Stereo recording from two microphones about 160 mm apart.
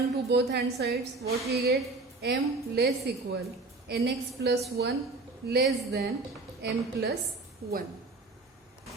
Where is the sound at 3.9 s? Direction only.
90° right.